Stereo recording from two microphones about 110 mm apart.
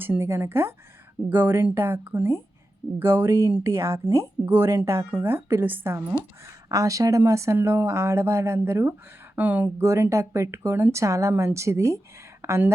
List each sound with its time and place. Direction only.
0.0 s speech: 20° right (ahead or behind)
6.7 s speech: 30° right (ahead or behind); by 9.8 s 15° right (ahead or behind)
9.8 s speech: 25° right (ahead or behind)